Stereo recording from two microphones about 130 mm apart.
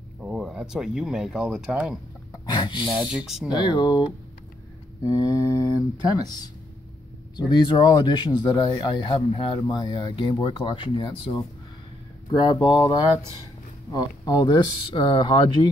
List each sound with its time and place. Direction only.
0.2 s speech: 5° right (ahead or behind)
2.5 s speech: 35° left (ahead or behind)
2.9 s speech: 5° right (ahead or behind)
3.5 s speech: 35° left (ahead or behind)
5.0 s mantra: 25° left (ahead or behind)
6.1 s speech: 30° left (ahead or behind)
12.3 s speech: 35° left (ahead or behind)